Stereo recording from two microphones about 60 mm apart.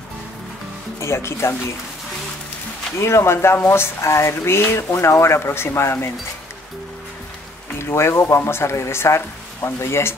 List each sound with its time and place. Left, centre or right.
0.9 s speech: left
3.0 s speech: left
7.8 s speech: left